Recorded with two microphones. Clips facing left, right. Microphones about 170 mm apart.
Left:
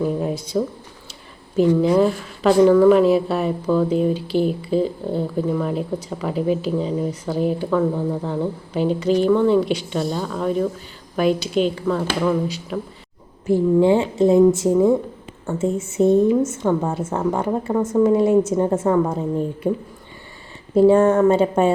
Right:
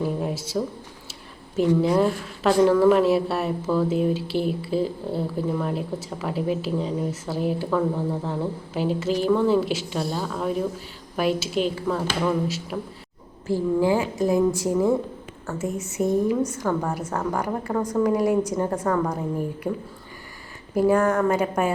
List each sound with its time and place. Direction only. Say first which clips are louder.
0.0 s a sound: left 4 dB; centre (ahead or behind)
1.5 s a woman's voice: left 4 dB; centre (ahead or behind)
13.5 s a woman's voice: left 6 dB; 25° left (ahead or behind)
20.7 s a woman's voice: left 6 dB; 25° left (ahead or behind)